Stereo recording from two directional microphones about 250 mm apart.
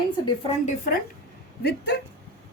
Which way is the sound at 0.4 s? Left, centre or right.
Left.